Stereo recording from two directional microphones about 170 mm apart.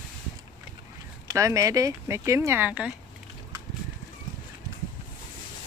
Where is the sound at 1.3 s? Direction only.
20° right (ahead or behind).